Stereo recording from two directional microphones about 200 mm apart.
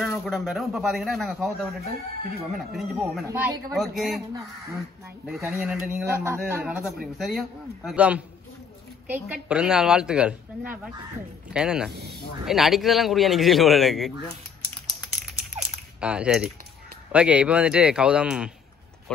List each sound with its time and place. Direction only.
0.2 s a woman's voice: centre (ahead or behind)
5.5 s a woman's voice: 5° right (ahead or behind)
11.9 s speech: 55° right (ahead or behind)
12.4 s a woman's voice: centre (ahead or behind)
15.6 s a sound: 5° right (ahead or behind)
17.1 s a woman's voice: 5° right (ahead or behind)